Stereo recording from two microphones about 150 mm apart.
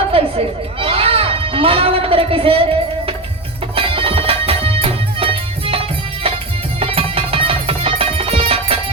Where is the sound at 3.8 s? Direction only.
40° right (ahead or behind).